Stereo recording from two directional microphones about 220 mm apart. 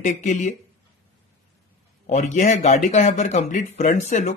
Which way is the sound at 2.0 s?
30° left (ahead or behind).